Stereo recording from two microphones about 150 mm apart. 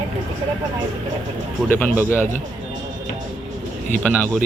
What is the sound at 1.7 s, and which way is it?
Speech, 10° left (ahead or behind).